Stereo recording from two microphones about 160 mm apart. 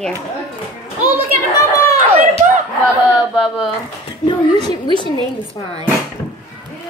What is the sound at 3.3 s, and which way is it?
Speech, centre (ahead or behind).